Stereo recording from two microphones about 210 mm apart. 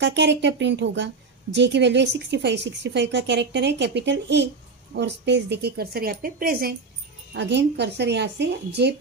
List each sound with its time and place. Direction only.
0.0 s speech: 55° right (ahead or behind)
7.3 s speech: 55° right (ahead or behind)